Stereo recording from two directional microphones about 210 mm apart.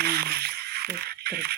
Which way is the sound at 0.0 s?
50° right (ahead or behind).